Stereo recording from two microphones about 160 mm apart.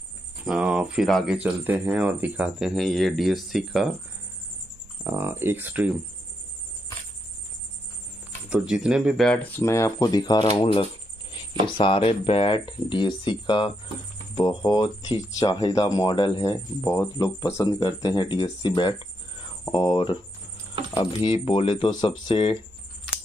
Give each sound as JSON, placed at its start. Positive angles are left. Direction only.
{"t": 0.5, "sound": "speech", "side_deg": -5}
{"t": 5.1, "sound": "speech", "side_deg": -15}
{"t": 8.5, "sound": "speech", "side_deg": -5}
{"t": 10.6, "sound": "speech", "side_deg": 35}